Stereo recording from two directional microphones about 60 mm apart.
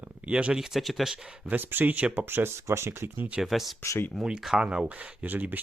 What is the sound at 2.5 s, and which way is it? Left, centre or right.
Speech, right.